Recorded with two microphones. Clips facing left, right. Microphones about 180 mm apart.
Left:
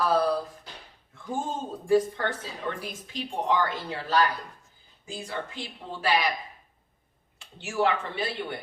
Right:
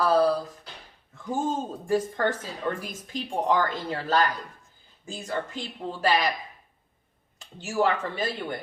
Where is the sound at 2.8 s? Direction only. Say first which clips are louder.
Right 1 dB; 45° right (ahead or behind).